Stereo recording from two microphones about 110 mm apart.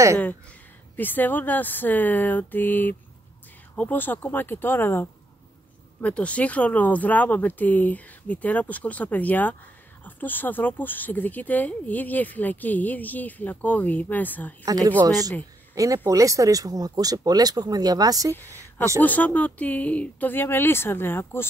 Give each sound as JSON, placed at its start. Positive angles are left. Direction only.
{"t": 0.9, "sound": "speech", "side_deg": 15}
{"t": 14.6, "sound": "speech", "side_deg": -35}
{"t": 19.0, "sound": "speech", "side_deg": 15}